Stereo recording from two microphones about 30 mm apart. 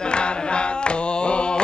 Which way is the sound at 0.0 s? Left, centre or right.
Left.